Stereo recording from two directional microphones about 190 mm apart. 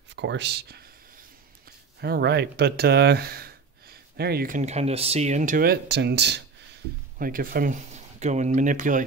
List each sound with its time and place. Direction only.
0.1 s speech: 70° right (ahead or behind)
2.0 s speech: 60° right (ahead or behind)
7.2 s speech: 50° right (ahead or behind)